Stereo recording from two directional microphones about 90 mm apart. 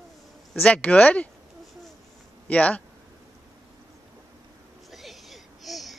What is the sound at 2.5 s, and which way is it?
Speech, 15° left (ahead or behind).